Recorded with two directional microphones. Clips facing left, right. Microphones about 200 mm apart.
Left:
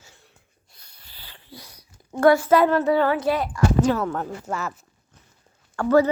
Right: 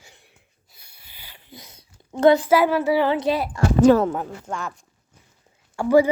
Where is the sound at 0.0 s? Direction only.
15° right (ahead or behind).